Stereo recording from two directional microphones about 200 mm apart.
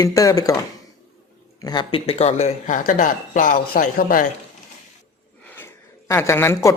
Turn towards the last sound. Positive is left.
turn(degrees=10)  # may be behind; listen again after turning